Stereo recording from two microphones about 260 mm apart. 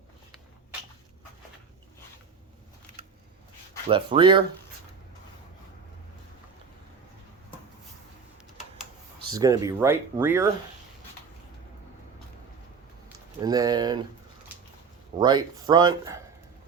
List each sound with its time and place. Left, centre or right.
3.8 s speech: centre
9.2 s speech: centre
13.4 s speech: centre
15.2 s speech: centre